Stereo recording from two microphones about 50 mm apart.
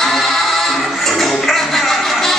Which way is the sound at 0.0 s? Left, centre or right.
Centre.